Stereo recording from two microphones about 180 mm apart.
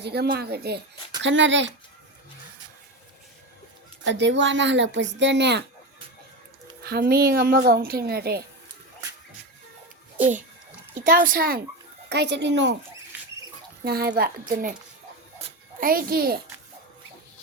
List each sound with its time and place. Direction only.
0.0 s speech: 65° right (ahead or behind)
1.2 s speech: 90° right
4.0 s speech: 80° right
6.8 s speech: 60° right (ahead or behind)
11.0 s speech: 50° right (ahead or behind)
12.0 s speech: 70° right (ahead or behind)
13.8 s speech: 60° right (ahead or behind)
14.2 s speech: 50° right (ahead or behind)
15.8 s speech: 55° right (ahead or behind)